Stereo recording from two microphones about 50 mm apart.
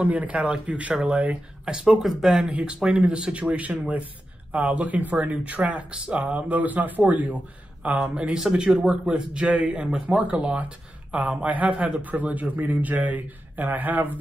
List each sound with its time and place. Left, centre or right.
0.0 s speech: right
1.7 s speech: centre
2.5 s speech: centre
8.1 s speech: right